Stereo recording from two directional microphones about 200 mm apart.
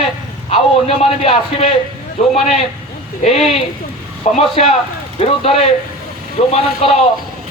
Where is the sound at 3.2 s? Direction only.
30° left (ahead or behind).